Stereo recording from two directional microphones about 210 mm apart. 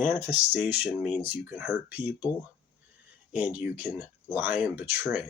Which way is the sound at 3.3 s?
5° right (ahead or behind).